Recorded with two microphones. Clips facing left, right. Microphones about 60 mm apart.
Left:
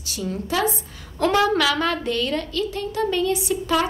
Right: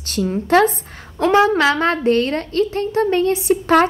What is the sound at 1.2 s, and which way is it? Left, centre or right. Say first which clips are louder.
A woman's voice: right 5 dB; right.